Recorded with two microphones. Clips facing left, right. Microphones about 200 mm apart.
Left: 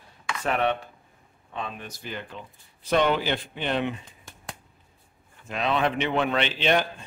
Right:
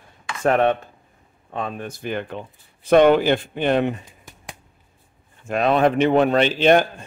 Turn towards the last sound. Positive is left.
turn(degrees=-45)  # may be behind; listen again after turning